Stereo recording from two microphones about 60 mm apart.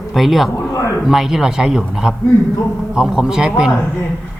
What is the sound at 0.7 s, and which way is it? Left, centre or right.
Speech, left.